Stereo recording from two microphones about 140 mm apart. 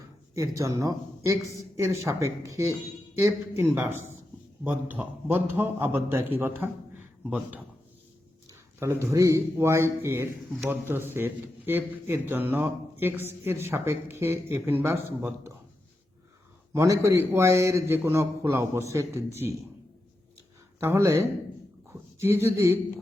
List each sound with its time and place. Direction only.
0.3 s a man's voice: 25° right (ahead or behind)
8.4 s a man's voice: 20° right (ahead or behind)
16.7 s a man's voice: 20° right (ahead or behind)
20.7 s a man's voice: 20° right (ahead or behind)